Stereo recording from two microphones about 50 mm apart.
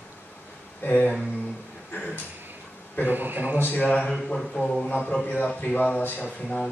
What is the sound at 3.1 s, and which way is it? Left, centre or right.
Speech, right.